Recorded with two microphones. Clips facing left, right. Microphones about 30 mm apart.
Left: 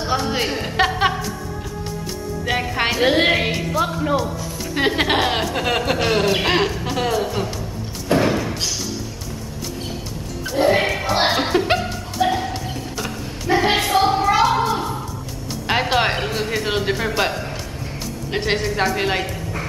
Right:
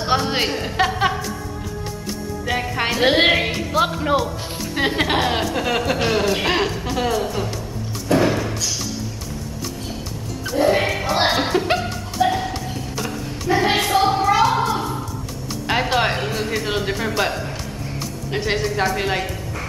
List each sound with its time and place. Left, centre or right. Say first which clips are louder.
0.1 s speech: right 2 dB; right
0.5 s speech: left 1 dB; centre
2.4 s speech: left 1 dB; centre
3.1 s speech: right 2 dB; centre
3.3 s music: even; centre
3.7 s speech: right 3 dB; right
4.7 s speech: left 1 dB; centre
8.1 s music: even; centre
10.5 s speech: left 1 dB; centre
11.8 s music: right 1 dB; centre
13.5 s a sound: even; centre
15.6 s speech: left 1 dB; centre